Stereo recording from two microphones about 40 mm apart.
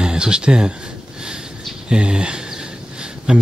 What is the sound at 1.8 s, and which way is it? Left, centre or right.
Speech, right.